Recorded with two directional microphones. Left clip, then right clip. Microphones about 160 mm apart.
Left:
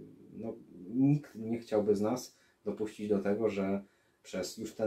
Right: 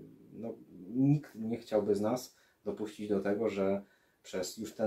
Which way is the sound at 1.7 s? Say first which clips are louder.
Even; 30° right (ahead or behind).